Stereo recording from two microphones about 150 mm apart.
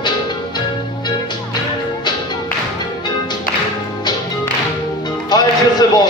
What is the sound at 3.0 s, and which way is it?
Music, 30° left (ahead or behind).